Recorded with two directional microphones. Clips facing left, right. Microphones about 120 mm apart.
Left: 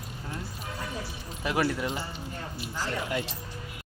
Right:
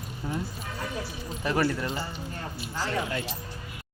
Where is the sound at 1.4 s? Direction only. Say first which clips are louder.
Right 1 dB; 5° left (ahead or behind).